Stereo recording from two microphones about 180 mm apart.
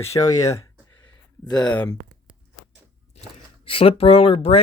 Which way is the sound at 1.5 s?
5° left (ahead or behind).